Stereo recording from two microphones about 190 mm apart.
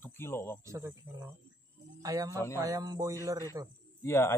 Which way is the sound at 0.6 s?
15° right (ahead or behind).